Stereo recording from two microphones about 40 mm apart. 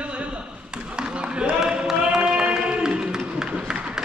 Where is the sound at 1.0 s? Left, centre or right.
Right.